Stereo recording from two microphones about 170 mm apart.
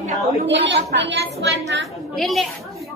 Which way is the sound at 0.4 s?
90° right.